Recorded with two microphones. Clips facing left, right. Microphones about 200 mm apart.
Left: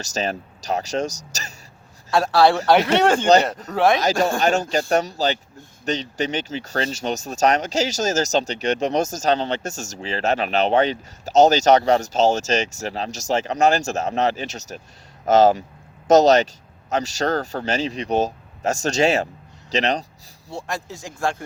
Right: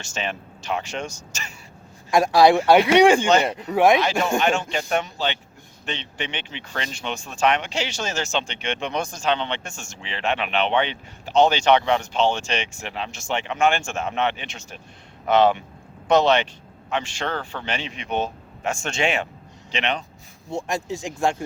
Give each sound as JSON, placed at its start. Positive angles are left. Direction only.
{"t": 0.0, "sound": "speech", "side_deg": 40}
{"t": 2.0, "sound": "speech", "side_deg": -15}
{"t": 3.9, "sound": "speech", "side_deg": 40}
{"t": 20.5, "sound": "speech", "side_deg": -15}